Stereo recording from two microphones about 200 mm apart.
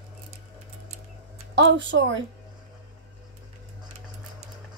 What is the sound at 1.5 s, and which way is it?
Speech, 65° right (ahead or behind).